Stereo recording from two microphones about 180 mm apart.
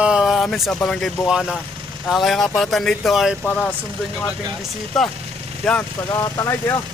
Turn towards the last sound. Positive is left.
turn(degrees=15)  # may be behind; listen again after turning